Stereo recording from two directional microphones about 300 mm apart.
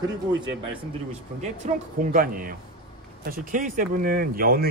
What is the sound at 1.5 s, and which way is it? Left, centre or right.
Speech, right.